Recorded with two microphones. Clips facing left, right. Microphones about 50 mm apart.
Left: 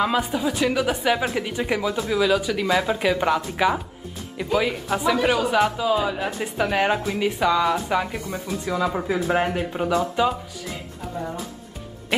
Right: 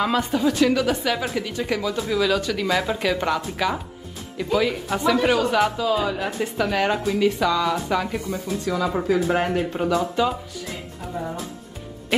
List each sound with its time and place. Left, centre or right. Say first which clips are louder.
0.0 s a woman's voice: right 1 dB; centre
11.1 s speech: right 1 dB; centre